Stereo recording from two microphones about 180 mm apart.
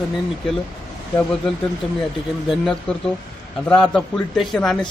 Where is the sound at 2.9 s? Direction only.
5° left (ahead or behind).